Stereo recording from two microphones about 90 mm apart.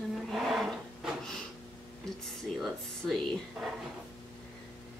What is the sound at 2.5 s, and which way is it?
Speech, centre (ahead or behind).